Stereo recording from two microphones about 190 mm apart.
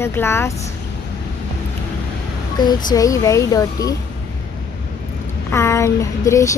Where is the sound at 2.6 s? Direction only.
20° left (ahead or behind).